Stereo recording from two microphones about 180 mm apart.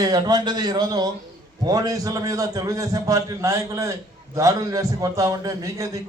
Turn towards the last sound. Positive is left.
turn(degrees=-20)  # may be behind; listen again after turning